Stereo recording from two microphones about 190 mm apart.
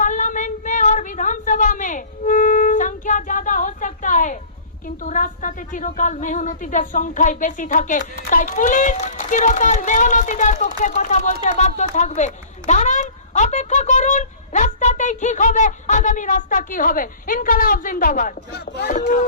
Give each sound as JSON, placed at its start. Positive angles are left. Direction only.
{"t": 0.0, "sound": "a sound", "side_deg": 40}
{"t": 5.0, "sound": "speech", "side_deg": 45}
{"t": 18.9, "sound": "speech", "side_deg": 45}